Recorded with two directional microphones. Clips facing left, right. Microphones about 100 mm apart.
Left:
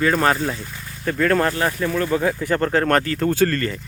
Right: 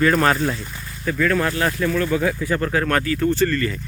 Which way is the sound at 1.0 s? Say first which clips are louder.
Left 1 dB; 45° left (ahead or behind).